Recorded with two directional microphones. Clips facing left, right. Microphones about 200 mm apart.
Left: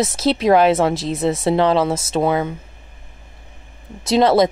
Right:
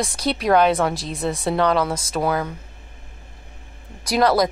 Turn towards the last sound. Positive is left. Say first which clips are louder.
# left 4 dB
turn(degrees=25)  # may be behind; listen again after turning